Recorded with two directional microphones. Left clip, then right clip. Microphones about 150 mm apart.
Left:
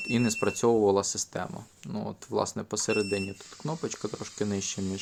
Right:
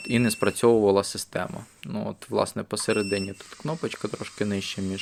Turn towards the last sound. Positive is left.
turn(degrees=-10)  # may be behind; listen again after turning